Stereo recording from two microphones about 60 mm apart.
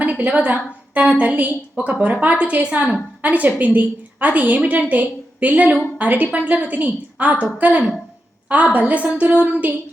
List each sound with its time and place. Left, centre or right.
0.0 s a woman's voice: right